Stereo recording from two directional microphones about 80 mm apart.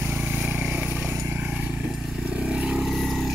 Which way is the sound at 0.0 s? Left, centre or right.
Centre.